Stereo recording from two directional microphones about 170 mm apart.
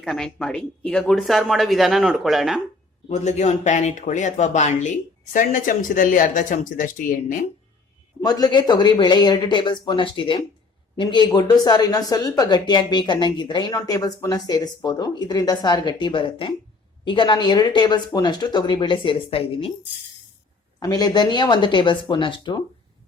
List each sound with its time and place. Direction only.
0.0 s speech: 5° left (ahead or behind)
3.1 s speech: 45° left (ahead or behind)
8.2 s speech: 25° left (ahead or behind)
20.7 s speech: 20° left (ahead or behind)